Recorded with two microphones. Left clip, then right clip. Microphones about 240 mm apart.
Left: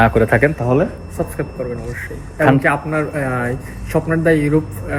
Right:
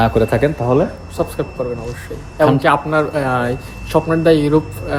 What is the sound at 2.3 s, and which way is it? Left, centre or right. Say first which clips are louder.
A man's voice: right 2 dB; centre.